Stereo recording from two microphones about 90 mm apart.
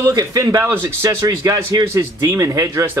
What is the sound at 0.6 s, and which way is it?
A man's voice, 30° right (ahead or behind).